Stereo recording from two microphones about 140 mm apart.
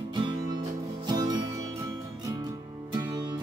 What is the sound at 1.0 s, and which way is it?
Music, 30° right (ahead or behind).